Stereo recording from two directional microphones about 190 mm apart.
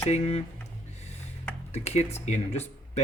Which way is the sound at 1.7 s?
35° left (ahead or behind).